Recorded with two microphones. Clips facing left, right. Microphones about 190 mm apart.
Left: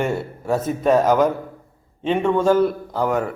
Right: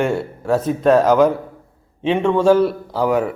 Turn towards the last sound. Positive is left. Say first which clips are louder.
# right 3 dB
turn(degrees=-5)  # may be behind; listen again after turning